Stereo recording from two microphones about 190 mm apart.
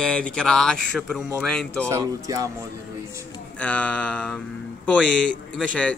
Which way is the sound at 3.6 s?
5° left (ahead or behind).